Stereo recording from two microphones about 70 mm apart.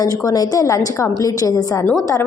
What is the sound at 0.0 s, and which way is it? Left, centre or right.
A woman's voice, left.